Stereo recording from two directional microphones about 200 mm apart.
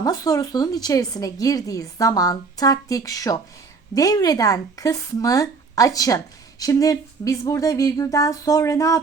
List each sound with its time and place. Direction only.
0.0 s speech: 20° left (ahead or behind)